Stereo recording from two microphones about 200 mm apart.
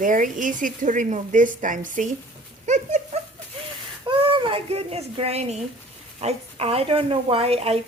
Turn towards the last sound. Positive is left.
turn(degrees=-30)  # may be behind; listen again after turning